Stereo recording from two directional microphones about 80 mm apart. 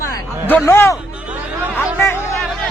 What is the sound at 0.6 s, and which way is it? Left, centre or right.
Speech, left.